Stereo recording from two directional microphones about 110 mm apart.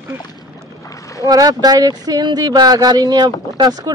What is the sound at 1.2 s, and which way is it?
Speech, 35° right (ahead or behind).